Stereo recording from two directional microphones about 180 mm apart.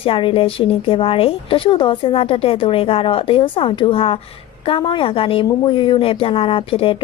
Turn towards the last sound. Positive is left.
turn(degrees=30)  # may be behind; listen again after turning